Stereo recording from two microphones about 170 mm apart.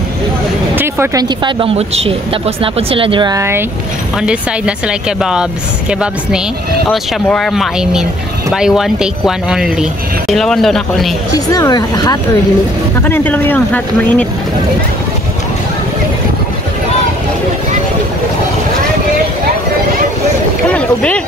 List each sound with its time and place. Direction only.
0.7 s speech: 15° right (ahead or behind)
1.4 s speech: 30° right (ahead or behind); by 3.6 s 15° right (ahead or behind)
4.2 s speech: 5° right (ahead or behind)
11.3 s speech: 20° left (ahead or behind)
13.0 s speech: 10° left (ahead or behind)
20.7 s a sound: 5° left (ahead or behind)